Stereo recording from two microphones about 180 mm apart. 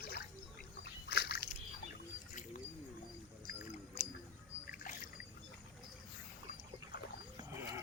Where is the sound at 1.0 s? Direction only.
65° left (ahead or behind).